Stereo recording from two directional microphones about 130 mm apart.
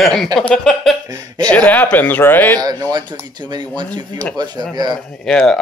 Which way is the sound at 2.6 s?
30° right (ahead or behind).